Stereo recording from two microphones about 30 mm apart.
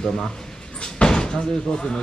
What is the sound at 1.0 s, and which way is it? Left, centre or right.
Door, left.